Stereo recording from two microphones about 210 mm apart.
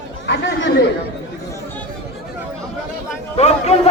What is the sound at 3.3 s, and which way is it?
Speech, 30° left (ahead or behind).